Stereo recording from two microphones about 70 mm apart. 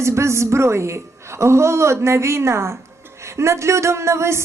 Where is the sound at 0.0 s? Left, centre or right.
Right.